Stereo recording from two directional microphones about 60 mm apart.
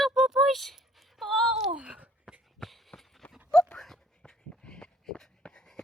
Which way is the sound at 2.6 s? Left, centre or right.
Centre.